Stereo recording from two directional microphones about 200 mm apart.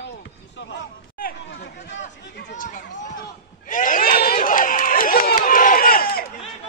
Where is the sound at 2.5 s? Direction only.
40° left (ahead or behind).